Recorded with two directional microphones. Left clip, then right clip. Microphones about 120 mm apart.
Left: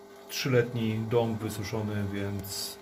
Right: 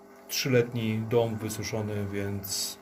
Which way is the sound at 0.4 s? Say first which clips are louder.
Right 1 dB; 50° right (ahead or behind).